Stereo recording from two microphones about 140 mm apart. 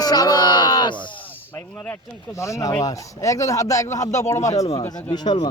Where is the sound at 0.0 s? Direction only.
30° left (ahead or behind).